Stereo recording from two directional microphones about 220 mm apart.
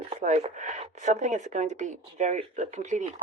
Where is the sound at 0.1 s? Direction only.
30° right (ahead or behind).